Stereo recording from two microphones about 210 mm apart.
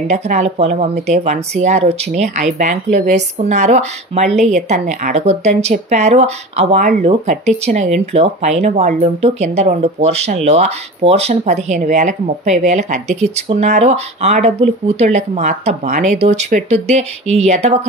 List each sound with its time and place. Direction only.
0.1 s speech: 30° right (ahead or behind)